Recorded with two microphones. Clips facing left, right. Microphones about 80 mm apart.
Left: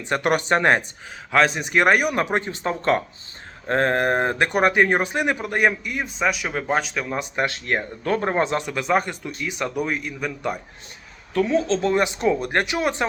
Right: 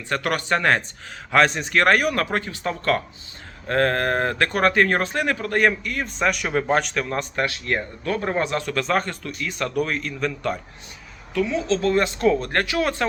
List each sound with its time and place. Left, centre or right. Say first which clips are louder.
0.0 s speech: left 3 dB; left
1.3 s speech: right 1 dB; centre
1.6 s speech: even; centre
7.4 s speech: left 1 dB; left
8.6 s speech: left 1 dB; centre
11.3 s a woman's voice: left 2 dB; left
11.8 s speech: right 1 dB; centre